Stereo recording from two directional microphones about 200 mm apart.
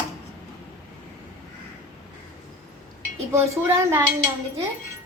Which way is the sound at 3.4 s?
10° right (ahead or behind).